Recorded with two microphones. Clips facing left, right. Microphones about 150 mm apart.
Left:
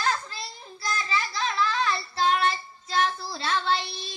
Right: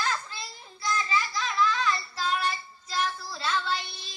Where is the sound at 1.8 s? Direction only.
30° left (ahead or behind).